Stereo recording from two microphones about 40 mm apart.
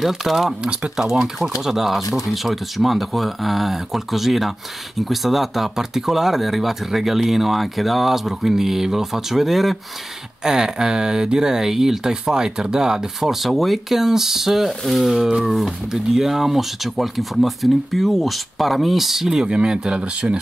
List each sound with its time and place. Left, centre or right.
0.0 s speech: centre
0.5 s speech: right; by 9.8 s centre
10.4 s speech: centre
19.4 s speech: right